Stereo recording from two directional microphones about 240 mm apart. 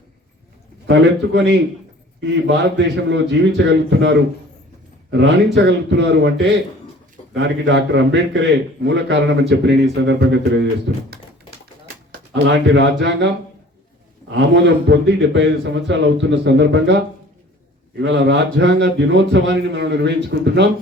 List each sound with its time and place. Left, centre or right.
0.9 s a man's voice: right
5.5 s a man's voice: right
7.3 s a man's voice: right
12.3 s a man's voice: right